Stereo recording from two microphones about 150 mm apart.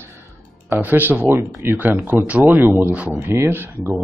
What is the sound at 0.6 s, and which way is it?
Speech, 10° right (ahead or behind).